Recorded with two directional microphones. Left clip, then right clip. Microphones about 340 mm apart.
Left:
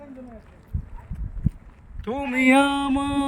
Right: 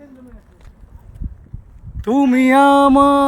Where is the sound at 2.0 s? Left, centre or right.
Right.